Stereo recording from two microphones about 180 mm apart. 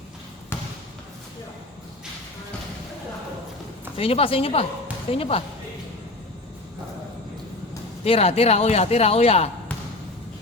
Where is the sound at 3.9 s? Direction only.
30° left (ahead or behind).